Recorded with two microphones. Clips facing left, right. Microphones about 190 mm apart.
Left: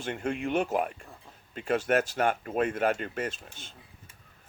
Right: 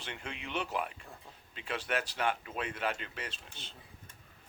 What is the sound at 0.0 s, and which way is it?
Speech, 45° left (ahead or behind).